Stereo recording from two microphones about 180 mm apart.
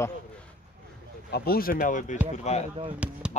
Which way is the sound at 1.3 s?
55° left (ahead or behind).